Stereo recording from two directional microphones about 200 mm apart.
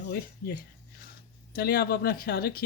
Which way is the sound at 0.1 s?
50° left (ahead or behind).